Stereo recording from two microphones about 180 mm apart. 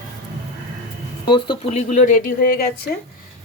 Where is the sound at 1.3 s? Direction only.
25° left (ahead or behind).